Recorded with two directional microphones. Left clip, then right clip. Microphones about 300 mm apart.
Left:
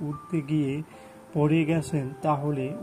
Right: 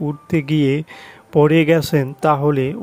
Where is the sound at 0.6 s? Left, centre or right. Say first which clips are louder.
Right 12 dB; right.